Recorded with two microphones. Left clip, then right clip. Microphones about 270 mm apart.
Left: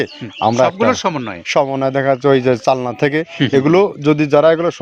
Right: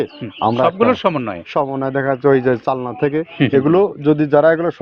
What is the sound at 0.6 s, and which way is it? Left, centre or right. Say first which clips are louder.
Speech: even; centre.